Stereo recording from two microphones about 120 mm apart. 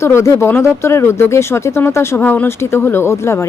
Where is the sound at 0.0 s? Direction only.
25° left (ahead or behind).